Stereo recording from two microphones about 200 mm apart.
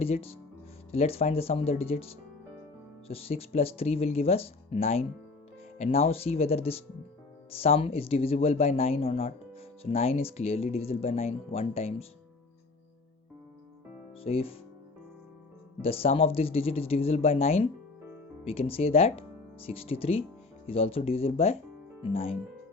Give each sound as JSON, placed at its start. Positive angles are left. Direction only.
{"t": 0.0, "sound": "speech", "side_deg": 30}
{"t": 14.3, "sound": "speech", "side_deg": 30}
{"t": 15.8, "sound": "speech", "side_deg": 30}